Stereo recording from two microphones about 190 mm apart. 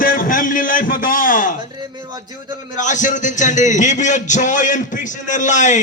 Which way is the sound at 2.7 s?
40° left (ahead or behind).